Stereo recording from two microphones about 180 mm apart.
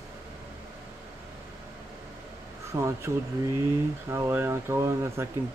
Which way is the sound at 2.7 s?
15° right (ahead or behind).